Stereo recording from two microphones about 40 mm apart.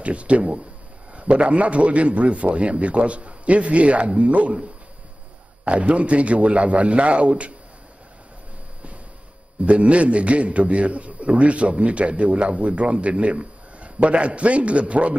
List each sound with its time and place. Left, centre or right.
0.0 s a man's voice: right
5.7 s a man's voice: right
9.7 s a man's voice: right